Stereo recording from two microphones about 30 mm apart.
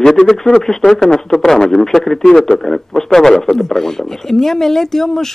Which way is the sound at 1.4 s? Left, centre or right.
Centre.